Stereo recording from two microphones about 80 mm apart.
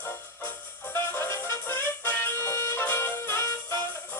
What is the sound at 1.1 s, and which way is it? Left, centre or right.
Music, left.